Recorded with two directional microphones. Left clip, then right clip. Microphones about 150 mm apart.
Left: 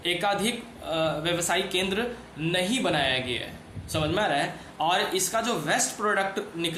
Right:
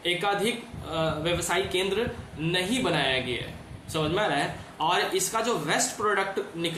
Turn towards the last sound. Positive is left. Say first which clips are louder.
# left 1 dB
turn(degrees=40)  # may be behind; listen again after turning